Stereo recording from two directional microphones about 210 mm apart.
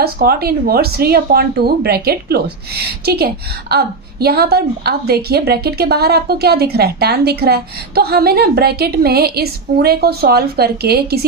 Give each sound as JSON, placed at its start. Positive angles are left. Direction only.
{"t": 0.0, "sound": "a woman's voice", "side_deg": -45}